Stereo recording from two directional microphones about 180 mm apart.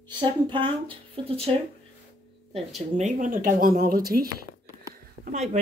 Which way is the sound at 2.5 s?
40° right (ahead or behind).